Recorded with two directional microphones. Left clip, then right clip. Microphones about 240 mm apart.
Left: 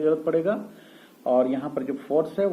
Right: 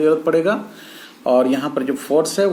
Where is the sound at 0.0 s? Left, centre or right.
Right.